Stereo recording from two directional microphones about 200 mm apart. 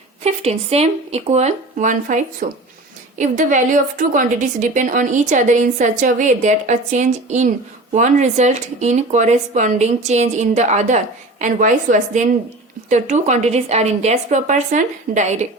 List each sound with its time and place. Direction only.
0.3 s a woman's voice: 30° right (ahead or behind)